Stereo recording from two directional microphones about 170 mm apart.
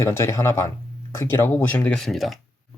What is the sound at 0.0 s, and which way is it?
Speech, 15° left (ahead or behind).